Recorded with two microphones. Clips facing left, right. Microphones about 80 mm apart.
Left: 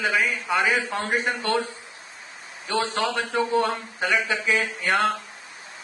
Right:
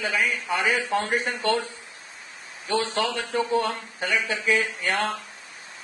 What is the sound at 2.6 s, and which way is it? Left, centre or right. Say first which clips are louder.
A man's voice: even; left.